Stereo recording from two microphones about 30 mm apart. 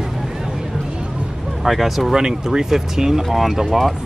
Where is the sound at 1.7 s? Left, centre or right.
Centre.